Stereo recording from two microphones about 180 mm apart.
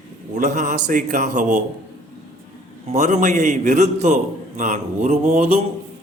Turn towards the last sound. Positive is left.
turn(degrees=-35)  # may be behind; listen again after turning